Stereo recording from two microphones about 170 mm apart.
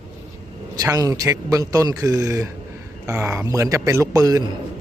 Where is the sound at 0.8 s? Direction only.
20° right (ahead or behind).